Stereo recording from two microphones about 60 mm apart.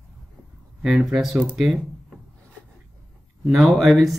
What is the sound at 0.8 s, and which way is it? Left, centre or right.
Speech, centre.